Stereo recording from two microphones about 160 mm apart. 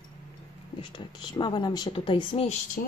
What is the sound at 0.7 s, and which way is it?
Speech, 30° left (ahead or behind).